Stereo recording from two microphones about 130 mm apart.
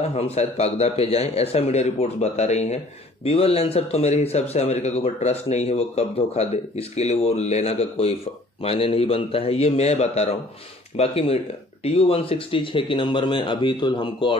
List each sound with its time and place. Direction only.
0.1 s a man's voice: 55° left (ahead or behind); by 14.3 s 35° left (ahead or behind)